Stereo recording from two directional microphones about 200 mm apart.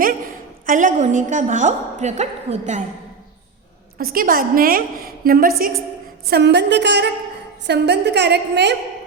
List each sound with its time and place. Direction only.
0.6 s a woman's voice: 40° right (ahead or behind)
3.9 s a woman's voice: 45° right (ahead or behind)
6.3 s a woman's voice: 60° right (ahead or behind)